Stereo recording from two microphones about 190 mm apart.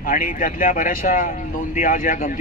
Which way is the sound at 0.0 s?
45° left (ahead or behind).